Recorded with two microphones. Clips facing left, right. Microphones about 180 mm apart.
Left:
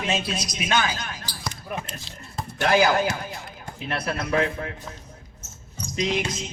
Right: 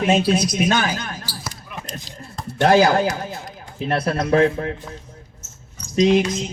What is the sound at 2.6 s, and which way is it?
Speech, 30° right (ahead or behind).